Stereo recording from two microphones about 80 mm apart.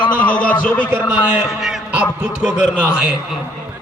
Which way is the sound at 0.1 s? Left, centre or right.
Centre.